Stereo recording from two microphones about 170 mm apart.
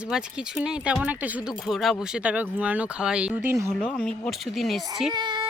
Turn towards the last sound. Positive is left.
turn(degrees=-25)  # may be behind; listen again after turning